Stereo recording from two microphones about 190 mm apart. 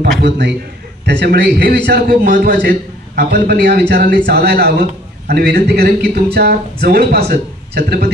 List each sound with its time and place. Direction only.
0.2 s a man's voice: 65° right (ahead or behind)